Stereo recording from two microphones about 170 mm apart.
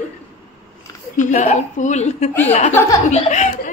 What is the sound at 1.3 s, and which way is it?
A woman's voice, 45° left (ahead or behind).